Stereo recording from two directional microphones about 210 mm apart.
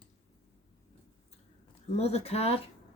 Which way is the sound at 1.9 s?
30° left (ahead or behind).